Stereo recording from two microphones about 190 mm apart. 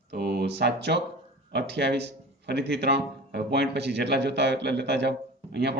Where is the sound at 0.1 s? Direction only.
60° right (ahead or behind).